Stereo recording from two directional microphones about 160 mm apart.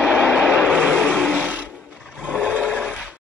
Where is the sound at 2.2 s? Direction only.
5° right (ahead or behind).